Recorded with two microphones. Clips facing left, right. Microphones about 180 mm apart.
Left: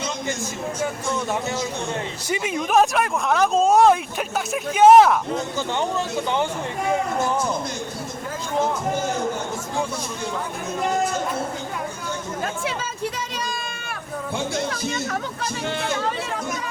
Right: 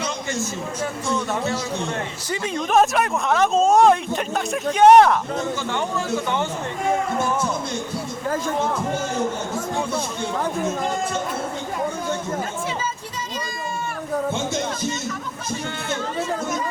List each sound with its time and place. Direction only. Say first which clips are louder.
2.3 s speech: left 1 dB; 10° left (ahead or behind)
2.7 s speech: right 1 dB; centre (ahead or behind)
12.6 s a sound: left 1 dB; 70° left (ahead or behind)